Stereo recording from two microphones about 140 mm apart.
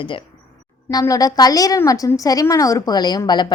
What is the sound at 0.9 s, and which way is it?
A woman's voice, 25° left (ahead or behind).